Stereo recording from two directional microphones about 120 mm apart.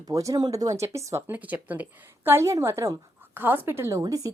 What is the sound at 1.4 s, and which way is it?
A woman's voice, 15° right (ahead or behind).